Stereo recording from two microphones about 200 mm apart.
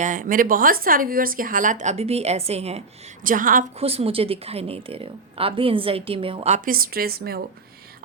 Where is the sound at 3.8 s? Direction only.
30° right (ahead or behind); by 7.4 s 50° right (ahead or behind).